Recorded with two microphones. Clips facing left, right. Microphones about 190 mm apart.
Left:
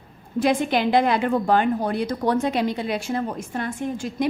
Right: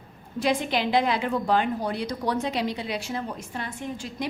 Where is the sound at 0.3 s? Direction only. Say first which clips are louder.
Left 4 dB; 50° left (ahead or behind).